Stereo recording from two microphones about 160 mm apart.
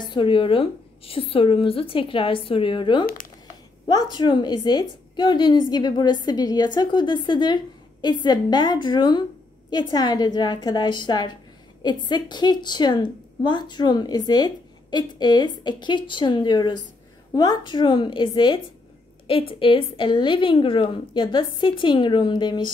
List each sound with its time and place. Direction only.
0.0 s a woman's voice: 30° left (ahead or behind)